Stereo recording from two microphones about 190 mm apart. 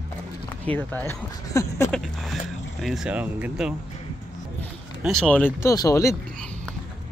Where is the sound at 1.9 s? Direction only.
Centre (ahead or behind).